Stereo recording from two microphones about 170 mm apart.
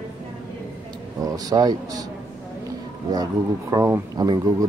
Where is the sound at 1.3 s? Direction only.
25° right (ahead or behind).